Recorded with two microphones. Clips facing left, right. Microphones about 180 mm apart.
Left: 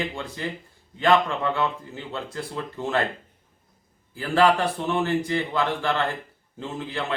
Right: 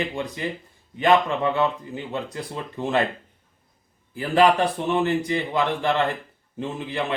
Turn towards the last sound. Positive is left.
turn(degrees=-20)  # may be behind; listen again after turning